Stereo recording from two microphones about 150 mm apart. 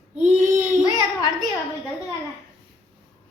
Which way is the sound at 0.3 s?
55° right (ahead or behind).